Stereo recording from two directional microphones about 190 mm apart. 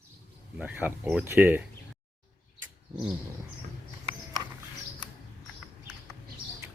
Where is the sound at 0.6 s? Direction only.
10° right (ahead or behind).